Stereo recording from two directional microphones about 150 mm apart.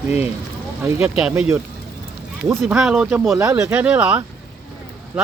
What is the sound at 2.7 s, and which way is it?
Speech, 5° right (ahead or behind).